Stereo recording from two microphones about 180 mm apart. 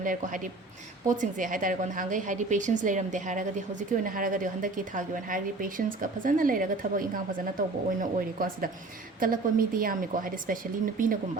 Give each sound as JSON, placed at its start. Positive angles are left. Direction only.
{"t": 0.0, "sound": "a woman's voice", "side_deg": -50}
{"t": 9.2, "sound": "a woman's voice", "side_deg": -50}